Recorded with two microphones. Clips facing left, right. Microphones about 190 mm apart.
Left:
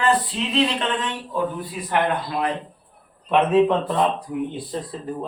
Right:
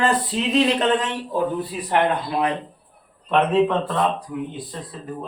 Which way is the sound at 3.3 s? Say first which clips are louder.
Left 1 dB; 15° left (ahead or behind).